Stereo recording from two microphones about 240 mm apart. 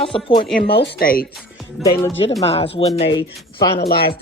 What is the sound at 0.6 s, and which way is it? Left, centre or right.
Speech, left.